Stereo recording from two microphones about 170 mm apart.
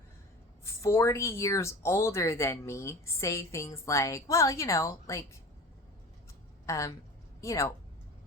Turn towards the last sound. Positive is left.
turn(degrees=15)  # may be behind; listen again after turning